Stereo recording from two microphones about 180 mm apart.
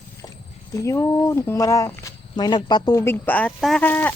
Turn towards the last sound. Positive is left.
turn(degrees=10)  # may be behind; listen again after turning